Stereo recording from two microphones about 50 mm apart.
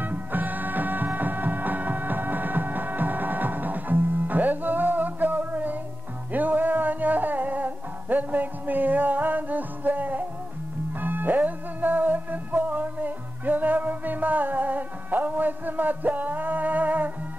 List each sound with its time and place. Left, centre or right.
0.0 s music: right